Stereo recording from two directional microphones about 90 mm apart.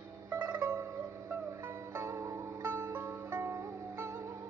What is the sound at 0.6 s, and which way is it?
Music, 30° right (ahead or behind).